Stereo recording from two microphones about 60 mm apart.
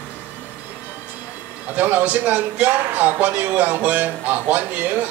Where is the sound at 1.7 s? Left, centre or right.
Right.